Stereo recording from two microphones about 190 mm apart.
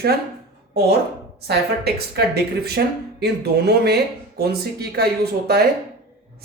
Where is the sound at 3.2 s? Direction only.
55° right (ahead or behind).